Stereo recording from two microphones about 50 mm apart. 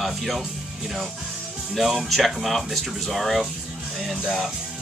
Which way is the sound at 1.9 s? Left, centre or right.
Centre.